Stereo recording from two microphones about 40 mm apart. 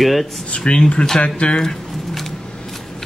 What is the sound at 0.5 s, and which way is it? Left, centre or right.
Speech, left.